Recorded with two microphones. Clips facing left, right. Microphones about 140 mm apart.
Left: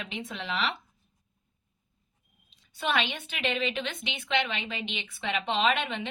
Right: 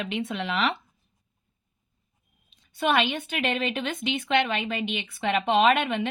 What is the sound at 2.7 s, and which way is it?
A woman's voice, 50° right (ahead or behind).